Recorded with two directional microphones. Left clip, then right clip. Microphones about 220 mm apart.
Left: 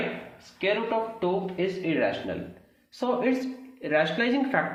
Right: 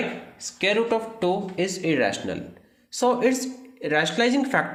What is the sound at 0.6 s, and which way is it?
Speech, 55° right (ahead or behind).